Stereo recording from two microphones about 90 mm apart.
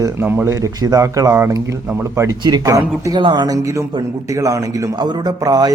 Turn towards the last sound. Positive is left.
turn(degrees=-45)  # may be behind; listen again after turning